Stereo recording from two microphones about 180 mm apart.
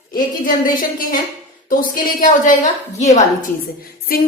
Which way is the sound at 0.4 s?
50° left (ahead or behind).